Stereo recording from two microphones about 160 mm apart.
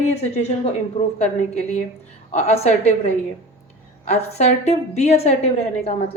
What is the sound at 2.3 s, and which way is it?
Speech, 40° left (ahead or behind).